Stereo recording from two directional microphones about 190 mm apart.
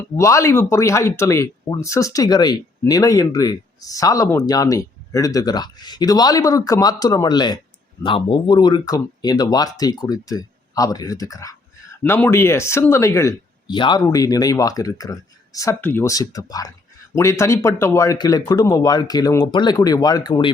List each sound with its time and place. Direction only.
0.2 s speech: 15° left (ahead or behind)